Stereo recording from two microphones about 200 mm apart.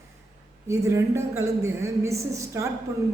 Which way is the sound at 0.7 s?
15° right (ahead or behind).